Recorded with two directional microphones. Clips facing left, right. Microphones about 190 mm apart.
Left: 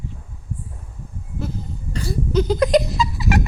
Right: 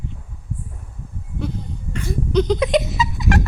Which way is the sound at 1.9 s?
35° left (ahead or behind).